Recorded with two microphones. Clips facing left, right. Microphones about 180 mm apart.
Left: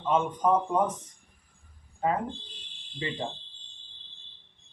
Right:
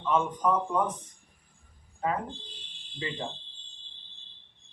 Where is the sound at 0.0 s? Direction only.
25° left (ahead or behind).